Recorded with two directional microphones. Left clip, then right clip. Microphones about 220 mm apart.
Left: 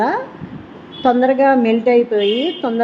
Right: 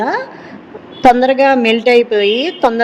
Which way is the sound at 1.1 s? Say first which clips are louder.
Right 1 dB; 40° right (ahead or behind).